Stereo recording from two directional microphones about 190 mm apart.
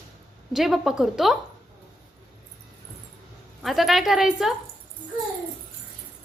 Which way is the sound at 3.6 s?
Centre (ahead or behind).